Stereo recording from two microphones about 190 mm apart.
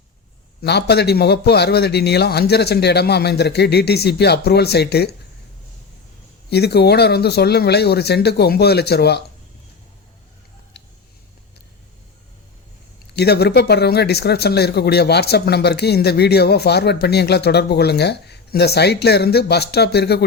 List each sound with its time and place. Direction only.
0.6 s speech: 60° left (ahead or behind)
6.5 s speech: 60° left (ahead or behind)
13.1 s speech: 60° left (ahead or behind)